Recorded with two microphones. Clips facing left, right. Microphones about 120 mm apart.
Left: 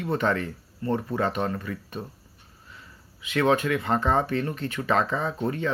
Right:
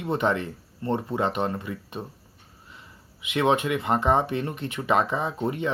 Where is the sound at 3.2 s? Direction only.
20° right (ahead or behind).